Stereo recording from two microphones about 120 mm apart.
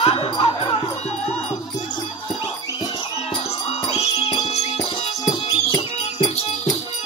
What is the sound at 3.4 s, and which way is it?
Music, 60° left (ahead or behind).